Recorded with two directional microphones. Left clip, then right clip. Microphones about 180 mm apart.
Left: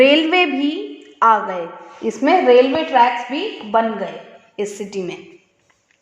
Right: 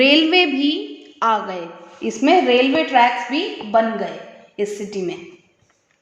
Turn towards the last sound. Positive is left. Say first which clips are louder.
# right 1 dB
turn(degrees=40)  # may be behind; listen again after turning